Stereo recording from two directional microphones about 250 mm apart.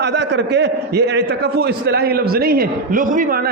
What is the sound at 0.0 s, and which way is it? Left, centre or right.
A man's voice, right.